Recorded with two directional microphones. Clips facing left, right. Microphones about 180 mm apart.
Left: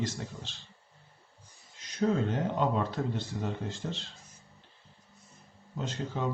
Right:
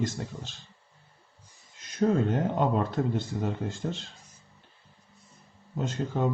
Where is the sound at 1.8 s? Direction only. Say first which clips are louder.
Right 3 dB; 50° right (ahead or behind).